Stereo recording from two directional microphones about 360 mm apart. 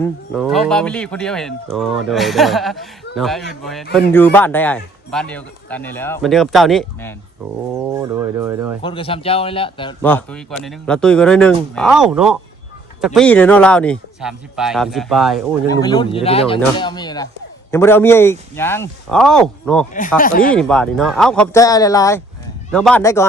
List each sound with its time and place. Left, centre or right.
0.0 s a man's voice: centre
8.8 s a man's voice: centre
15.7 s speech: centre
19.9 s speech: left
20.5 s a man's voice: centre